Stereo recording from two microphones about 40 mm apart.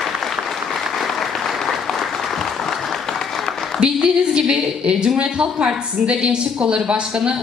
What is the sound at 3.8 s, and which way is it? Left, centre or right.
A woman's voice, right.